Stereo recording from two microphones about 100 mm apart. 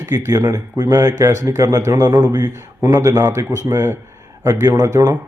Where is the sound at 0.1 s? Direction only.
35° right (ahead or behind).